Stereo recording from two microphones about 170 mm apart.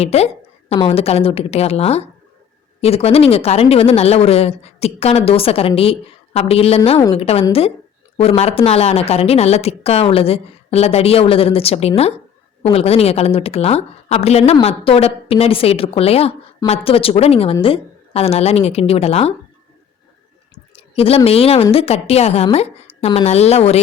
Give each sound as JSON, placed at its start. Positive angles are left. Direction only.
{"t": 0.0, "sound": "speech", "side_deg": 40}
{"t": 20.7, "sound": "a sound", "side_deg": 35}
{"t": 21.2, "sound": "speech", "side_deg": 35}